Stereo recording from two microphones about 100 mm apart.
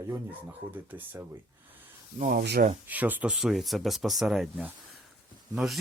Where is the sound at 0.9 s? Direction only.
15° right (ahead or behind).